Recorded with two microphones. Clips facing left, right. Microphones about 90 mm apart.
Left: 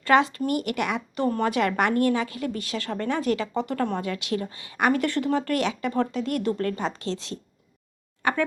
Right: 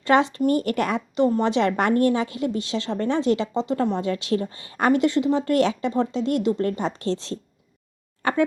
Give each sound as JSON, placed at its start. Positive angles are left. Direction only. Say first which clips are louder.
{"t": 0.0, "sound": "a woman's voice", "louder": "right 2 dB", "side_deg": -30}